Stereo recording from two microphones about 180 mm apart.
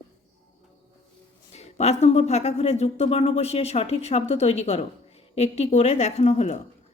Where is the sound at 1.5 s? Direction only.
35° left (ahead or behind).